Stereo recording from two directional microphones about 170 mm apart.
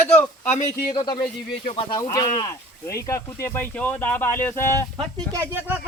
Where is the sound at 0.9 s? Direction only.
25° left (ahead or behind).